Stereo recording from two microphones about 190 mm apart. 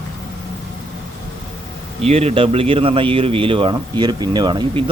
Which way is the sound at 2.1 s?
35° right (ahead or behind).